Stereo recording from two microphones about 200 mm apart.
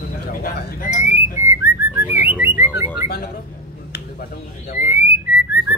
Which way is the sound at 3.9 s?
50° left (ahead or behind).